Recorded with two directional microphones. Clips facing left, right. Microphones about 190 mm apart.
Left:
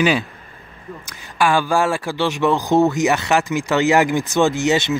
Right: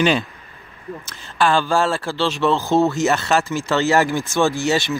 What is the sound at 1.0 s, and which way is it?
Speech, 15° left (ahead or behind).